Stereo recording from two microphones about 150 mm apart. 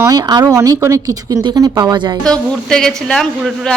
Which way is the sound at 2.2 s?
5° left (ahead or behind).